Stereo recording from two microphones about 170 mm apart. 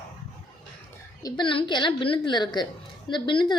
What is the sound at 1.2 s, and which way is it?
Speech, 25° left (ahead or behind).